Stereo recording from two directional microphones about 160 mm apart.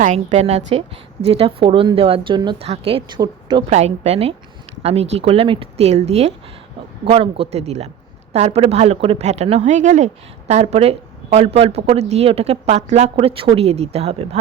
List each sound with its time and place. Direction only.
0.0 s speech: 50° right (ahead or behind)